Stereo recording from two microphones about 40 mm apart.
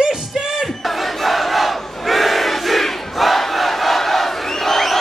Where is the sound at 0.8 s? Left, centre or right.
Centre.